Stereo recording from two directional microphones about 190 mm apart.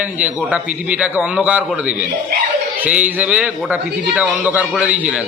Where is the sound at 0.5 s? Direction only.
5° right (ahead or behind).